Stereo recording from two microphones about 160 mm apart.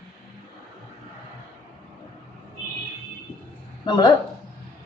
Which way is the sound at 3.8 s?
30° left (ahead or behind).